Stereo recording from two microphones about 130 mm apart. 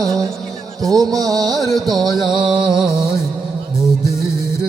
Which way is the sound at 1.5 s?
Centre (ahead or behind).